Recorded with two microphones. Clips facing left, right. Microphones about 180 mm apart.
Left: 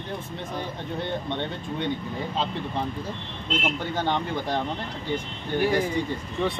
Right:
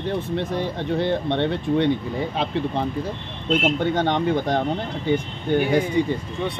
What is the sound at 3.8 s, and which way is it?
Speech, 65° right (ahead or behind).